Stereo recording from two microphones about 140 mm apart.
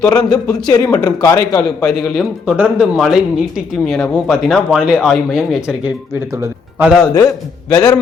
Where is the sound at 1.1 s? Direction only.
25° left (ahead or behind).